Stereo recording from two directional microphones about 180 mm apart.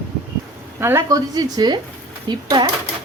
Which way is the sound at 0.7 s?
15° right (ahead or behind).